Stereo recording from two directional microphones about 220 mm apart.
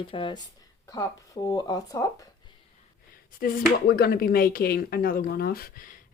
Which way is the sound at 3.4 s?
45° left (ahead or behind).